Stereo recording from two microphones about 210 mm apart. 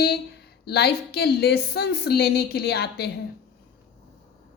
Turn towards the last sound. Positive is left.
turn(degrees=50)  # may be behind; listen again after turning